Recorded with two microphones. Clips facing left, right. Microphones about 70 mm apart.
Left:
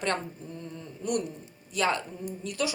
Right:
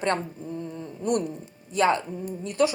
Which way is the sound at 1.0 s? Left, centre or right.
Right.